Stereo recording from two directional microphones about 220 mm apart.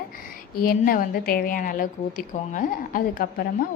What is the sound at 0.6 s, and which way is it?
A woman's voice, 40° left (ahead or behind).